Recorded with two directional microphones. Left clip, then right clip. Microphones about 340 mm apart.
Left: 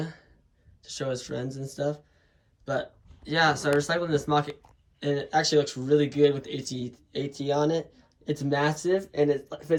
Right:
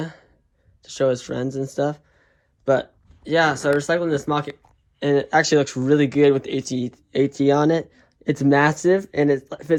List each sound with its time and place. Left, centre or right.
0.0 s a sound: centre
0.8 s speech: centre
3.2 s speech: centre